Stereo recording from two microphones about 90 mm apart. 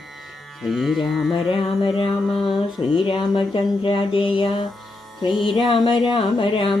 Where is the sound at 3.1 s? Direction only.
80° left.